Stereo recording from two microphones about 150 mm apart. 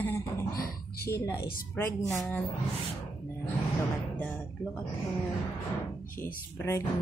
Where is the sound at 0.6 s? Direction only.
90° left.